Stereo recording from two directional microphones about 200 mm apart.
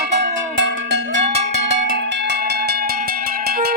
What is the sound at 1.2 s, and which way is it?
Percussion, 30° right (ahead or behind).